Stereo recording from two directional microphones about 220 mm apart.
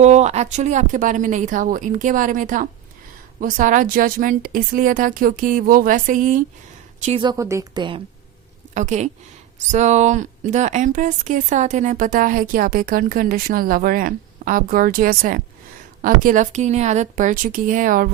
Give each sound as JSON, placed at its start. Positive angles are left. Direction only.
{"t": 0.0, "sound": "speech", "side_deg": -30}
{"t": 7.0, "sound": "a woman's voice", "side_deg": -25}
{"t": 8.7, "sound": "speech", "side_deg": -35}